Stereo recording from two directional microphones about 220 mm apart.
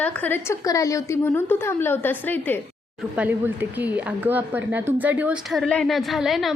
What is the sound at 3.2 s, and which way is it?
Speech, 10° right (ahead or behind).